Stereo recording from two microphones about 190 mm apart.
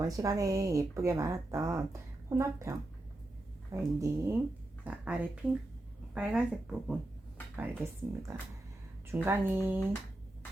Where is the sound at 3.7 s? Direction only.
15° right (ahead or behind).